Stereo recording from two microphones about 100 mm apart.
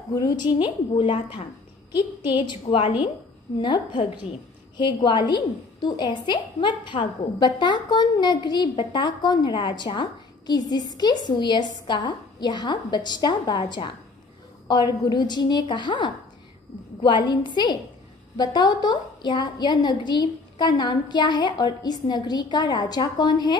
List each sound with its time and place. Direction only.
0.1 s a woman's voice: 45° left (ahead or behind)
0.9 s a woman's voice: 60° left (ahead or behind)
1.9 s a woman's voice: 50° left (ahead or behind)